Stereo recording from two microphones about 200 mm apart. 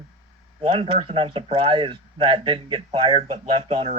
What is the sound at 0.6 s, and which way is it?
Speech, 30° right (ahead or behind).